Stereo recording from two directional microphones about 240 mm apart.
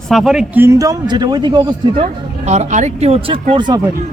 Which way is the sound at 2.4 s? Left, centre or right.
Right.